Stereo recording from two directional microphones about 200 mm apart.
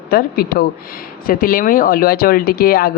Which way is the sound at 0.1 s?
50° left (ahead or behind).